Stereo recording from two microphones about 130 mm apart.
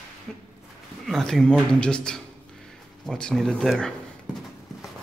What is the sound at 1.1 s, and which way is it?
A man's voice, 5° left (ahead or behind).